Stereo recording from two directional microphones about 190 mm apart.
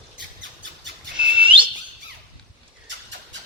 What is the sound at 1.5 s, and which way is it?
Whistle, 25° right (ahead or behind).